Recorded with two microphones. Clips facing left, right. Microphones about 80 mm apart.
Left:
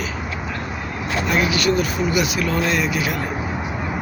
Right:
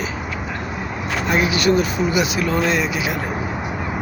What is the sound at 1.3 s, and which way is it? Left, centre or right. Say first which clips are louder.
Speech: right 2 dB; right.